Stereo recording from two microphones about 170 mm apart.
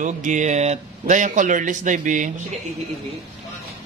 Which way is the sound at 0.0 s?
45° right (ahead or behind).